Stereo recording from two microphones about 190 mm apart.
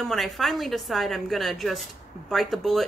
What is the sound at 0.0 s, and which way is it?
A woman's voice, centre (ahead or behind).